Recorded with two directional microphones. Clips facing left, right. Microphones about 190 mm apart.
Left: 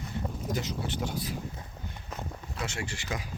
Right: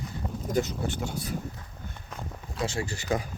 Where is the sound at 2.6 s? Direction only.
35° right (ahead or behind).